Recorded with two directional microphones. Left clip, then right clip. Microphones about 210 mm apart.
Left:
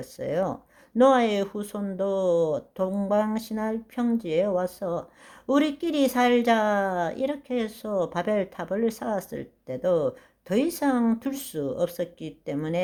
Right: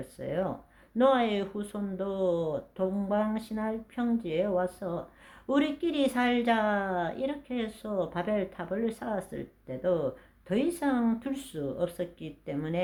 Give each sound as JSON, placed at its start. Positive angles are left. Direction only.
{"t": 0.2, "sound": "a woman's voice", "side_deg": 40}